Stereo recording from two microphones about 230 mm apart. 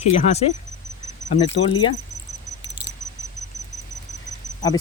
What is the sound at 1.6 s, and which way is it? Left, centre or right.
Speech, left.